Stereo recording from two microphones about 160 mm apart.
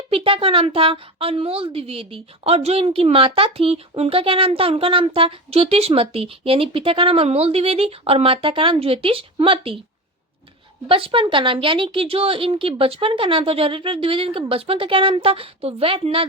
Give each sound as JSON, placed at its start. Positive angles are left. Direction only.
{"t": 0.1, "sound": "a woman's voice", "side_deg": -35}
{"t": 10.8, "sound": "a woman's voice", "side_deg": -35}